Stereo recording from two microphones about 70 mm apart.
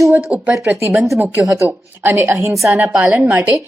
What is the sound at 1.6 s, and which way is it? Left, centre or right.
A woman's voice, right.